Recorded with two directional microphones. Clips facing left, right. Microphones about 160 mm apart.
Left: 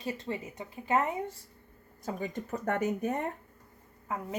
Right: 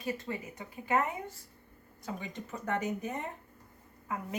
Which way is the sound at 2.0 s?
45° left (ahead or behind).